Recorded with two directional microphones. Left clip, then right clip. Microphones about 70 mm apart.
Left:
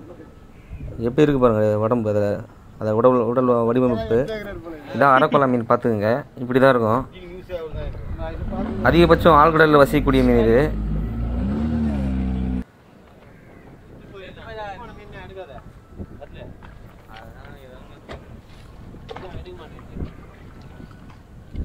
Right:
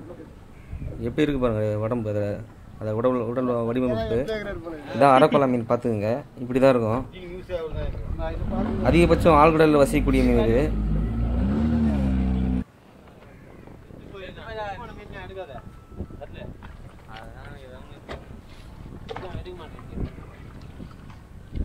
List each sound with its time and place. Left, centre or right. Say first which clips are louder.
1.0 s a man's voice: left 7 dB; left
4.3 s speech: even; right
4.8 s a man's voice: left 1 dB; centre
7.0 s a sound: left 4 dB; centre
7.6 s boat: even; centre
8.5 s speech: even; right
8.8 s a man's voice: left 5 dB; centre
10.8 s vehicle: even; right
14.2 s boat: right 1 dB; right
14.5 s vehicle: even; right
14.8 s a sound: even; right
19.0 s boat: even; right